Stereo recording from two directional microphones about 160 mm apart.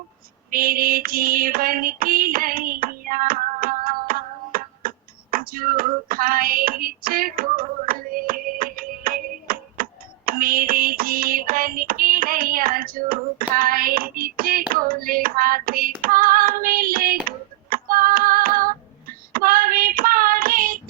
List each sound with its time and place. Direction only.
0.5 s child singing: 65° right (ahead or behind)
17.2 s a sound: 65° right (ahead or behind)
19.3 s child singing: 65° right (ahead or behind)